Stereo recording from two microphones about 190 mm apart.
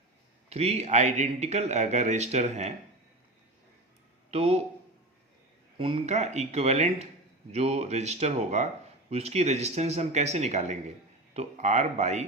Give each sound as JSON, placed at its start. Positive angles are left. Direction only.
{"t": 0.5, "sound": "speech", "side_deg": -35}
{"t": 4.3, "sound": "speech", "side_deg": -30}
{"t": 5.7, "sound": "speech", "side_deg": -30}